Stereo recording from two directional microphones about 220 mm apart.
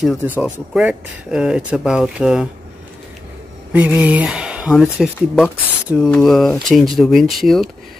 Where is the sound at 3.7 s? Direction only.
5° right (ahead or behind).